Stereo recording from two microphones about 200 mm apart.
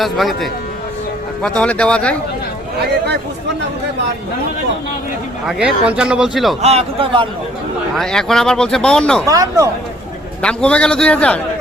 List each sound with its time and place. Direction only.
0.0 s speech: centre (ahead or behind)
5.8 s speech: 5° right (ahead or behind)
6.6 s a man's voice: 30° right (ahead or behind)
7.9 s speech: centre (ahead or behind)
9.2 s speech: 15° right (ahead or behind)
10.4 s speech: 5° left (ahead or behind)